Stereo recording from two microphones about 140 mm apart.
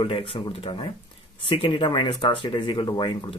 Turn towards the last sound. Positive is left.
turn(degrees=30)  # may be behind; listen again after turning